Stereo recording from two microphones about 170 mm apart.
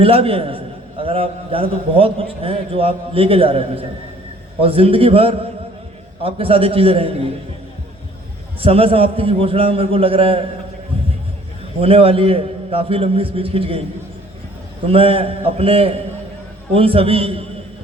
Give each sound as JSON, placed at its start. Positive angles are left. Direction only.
{"t": 0.0, "sound": "a man's voice", "side_deg": -35}
{"t": 8.6, "sound": "a man's voice", "side_deg": -35}
{"t": 11.8, "sound": "a man's voice", "side_deg": -35}
{"t": 14.8, "sound": "a man's voice", "side_deg": -35}